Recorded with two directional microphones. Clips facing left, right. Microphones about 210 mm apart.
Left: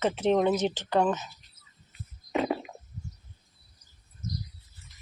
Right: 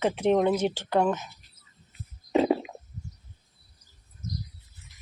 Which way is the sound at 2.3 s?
25° right (ahead or behind).